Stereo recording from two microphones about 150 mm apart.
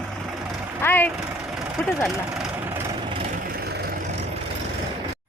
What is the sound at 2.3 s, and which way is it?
Vehicle, 5° right (ahead or behind).